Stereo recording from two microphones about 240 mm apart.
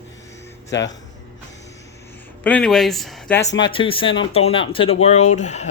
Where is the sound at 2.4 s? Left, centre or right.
Centre.